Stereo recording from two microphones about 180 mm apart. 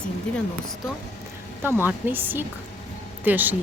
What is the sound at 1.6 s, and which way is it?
Speech, 10° right (ahead or behind).